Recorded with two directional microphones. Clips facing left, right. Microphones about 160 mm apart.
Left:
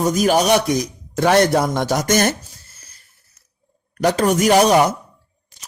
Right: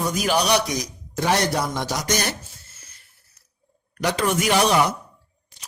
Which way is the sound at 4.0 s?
45° left (ahead or behind).